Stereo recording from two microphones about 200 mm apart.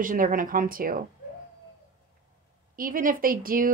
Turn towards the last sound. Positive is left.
turn(degrees=-45)  # may be behind; listen again after turning